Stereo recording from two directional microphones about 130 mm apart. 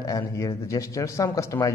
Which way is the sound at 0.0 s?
25° left (ahead or behind).